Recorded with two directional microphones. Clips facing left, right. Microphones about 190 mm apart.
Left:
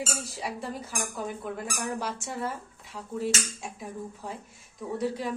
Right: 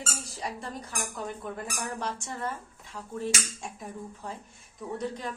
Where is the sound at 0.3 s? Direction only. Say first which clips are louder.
Even; 5° left (ahead or behind).